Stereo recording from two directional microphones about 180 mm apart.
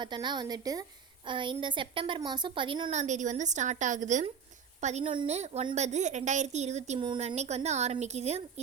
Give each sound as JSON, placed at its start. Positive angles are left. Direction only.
{"t": 0.0, "sound": "a woman's voice", "side_deg": -25}
{"t": 2.9, "sound": "a woman's voice", "side_deg": -40}